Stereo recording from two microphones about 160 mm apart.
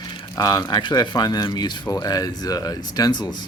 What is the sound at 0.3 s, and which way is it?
Speech, 25° left (ahead or behind).